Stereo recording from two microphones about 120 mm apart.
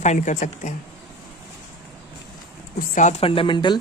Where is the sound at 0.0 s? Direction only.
80° left.